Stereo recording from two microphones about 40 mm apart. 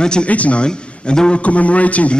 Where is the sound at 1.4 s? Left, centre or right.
Left.